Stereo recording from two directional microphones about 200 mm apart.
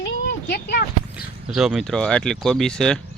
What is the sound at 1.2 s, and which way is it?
Speech, 5° right (ahead or behind).